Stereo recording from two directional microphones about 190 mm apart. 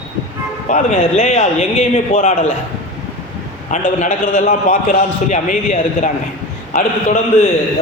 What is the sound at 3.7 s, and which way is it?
A man's voice, 40° left (ahead or behind).